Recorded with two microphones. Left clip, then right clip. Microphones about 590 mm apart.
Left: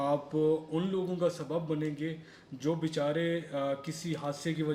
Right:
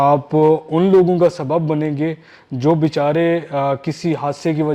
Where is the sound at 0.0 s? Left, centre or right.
Right.